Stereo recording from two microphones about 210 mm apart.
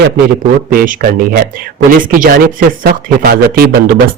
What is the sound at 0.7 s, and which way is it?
Speech, 40° right (ahead or behind).